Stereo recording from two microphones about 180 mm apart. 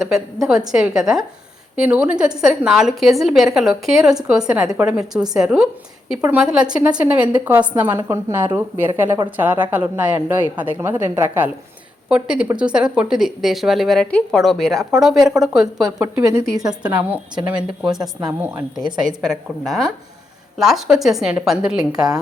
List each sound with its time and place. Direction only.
0.7 s a woman's voice: 5° right (ahead or behind)
16.0 s a woman's voice: 20° right (ahead or behind)
16.8 s a woman's voice: 10° right (ahead or behind)
21.9 s a woman's voice: 20° right (ahead or behind)